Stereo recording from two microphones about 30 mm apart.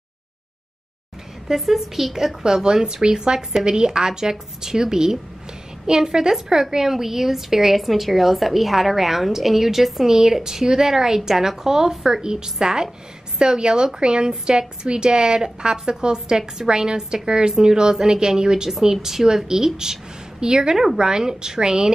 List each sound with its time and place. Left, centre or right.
1.5 s a woman's voice: centre
2.4 s a woman's voice: right; by 10.1 s centre
10.1 s a woman's voice: centre
13.4 s a woman's voice: right
20.7 s a woman's voice: centre